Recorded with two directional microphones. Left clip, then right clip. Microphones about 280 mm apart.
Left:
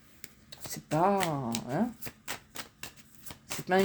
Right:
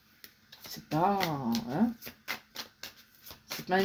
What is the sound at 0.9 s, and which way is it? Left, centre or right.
Speech, left.